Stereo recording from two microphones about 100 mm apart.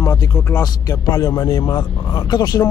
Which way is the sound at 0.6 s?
35° left (ahead or behind).